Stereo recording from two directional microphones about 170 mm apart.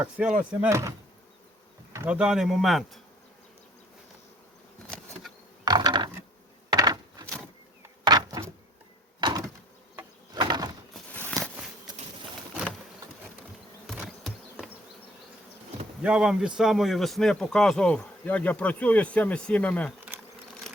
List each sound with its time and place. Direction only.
0.0 s speech: 10° right (ahead or behind)
5.6 s mechanisms: 25° right (ahead or behind)
6.7 s a sound: 25° right (ahead or behind)
9.2 s door: 25° right (ahead or behind)
10.3 s a sound: 25° right (ahead or behind)
14.3 s insect: centre (ahead or behind)
16.0 s speech: 5° right (ahead or behind)
20.1 s bee: 10° right (ahead or behind)